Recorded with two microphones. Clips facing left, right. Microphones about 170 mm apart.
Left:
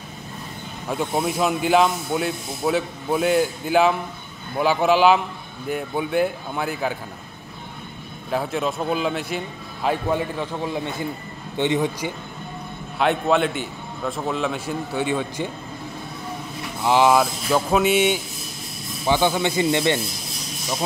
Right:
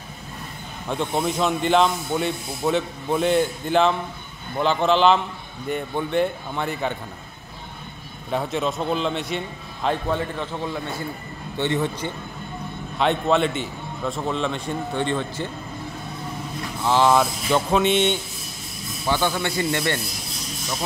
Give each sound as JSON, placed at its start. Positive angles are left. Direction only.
{"t": 0.8, "sound": "a man's voice", "side_deg": 5}
{"t": 8.3, "sound": "a man's voice", "side_deg": 0}
{"t": 13.0, "sound": "speech", "side_deg": 0}
{"t": 16.8, "sound": "a man's voice", "side_deg": 15}
{"t": 17.2, "sound": "a man's voice", "side_deg": 5}